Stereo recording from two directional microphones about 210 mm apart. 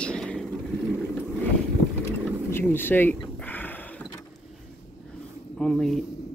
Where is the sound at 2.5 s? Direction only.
10° left (ahead or behind).